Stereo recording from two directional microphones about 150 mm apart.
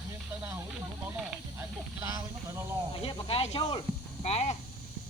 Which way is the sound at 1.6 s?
20° right (ahead or behind).